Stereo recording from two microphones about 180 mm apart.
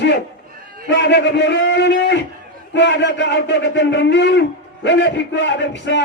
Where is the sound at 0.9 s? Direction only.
70° left (ahead or behind).